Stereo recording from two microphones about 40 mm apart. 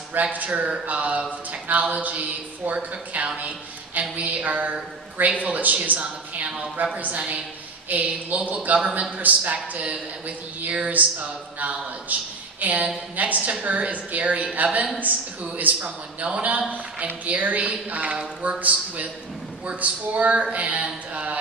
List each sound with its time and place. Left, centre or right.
0.2 s a woman's voice: right
17.0 s speech: right